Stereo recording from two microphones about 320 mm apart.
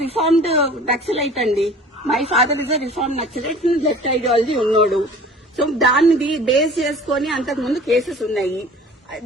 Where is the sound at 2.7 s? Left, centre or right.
Centre.